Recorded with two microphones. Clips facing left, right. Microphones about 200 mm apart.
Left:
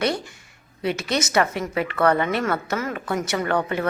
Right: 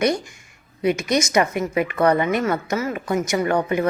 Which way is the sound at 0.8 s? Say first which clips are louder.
Right 4 dB; 15° right (ahead or behind).